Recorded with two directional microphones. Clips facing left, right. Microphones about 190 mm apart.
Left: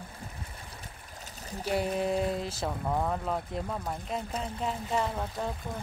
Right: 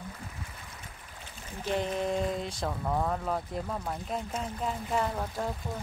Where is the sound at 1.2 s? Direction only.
40° left (ahead or behind).